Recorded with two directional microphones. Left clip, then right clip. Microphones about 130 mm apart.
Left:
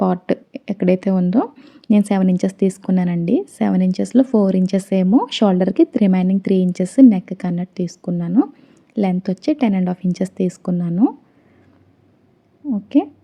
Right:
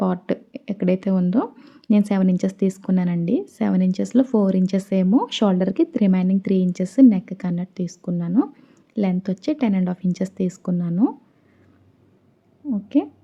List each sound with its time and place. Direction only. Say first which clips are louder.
0.0 s speech: left 5 dB; 35° left (ahead or behind)
1.9 s a woman's voice: left 3 dB; 35° left (ahead or behind)
12.7 s a woman's voice: left 4 dB; 35° left (ahead or behind)